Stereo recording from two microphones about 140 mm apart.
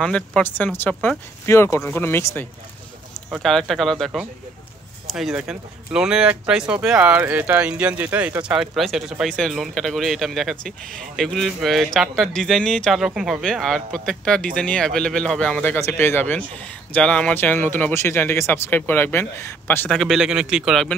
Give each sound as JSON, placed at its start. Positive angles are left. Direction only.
{"t": 0.0, "sound": "speech", "side_deg": 5}
{"t": 3.4, "sound": "speech", "side_deg": 0}
{"t": 19.9, "sound": "speech", "side_deg": 0}